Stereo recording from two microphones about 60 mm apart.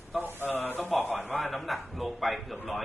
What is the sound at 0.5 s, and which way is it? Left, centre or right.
Speech, left.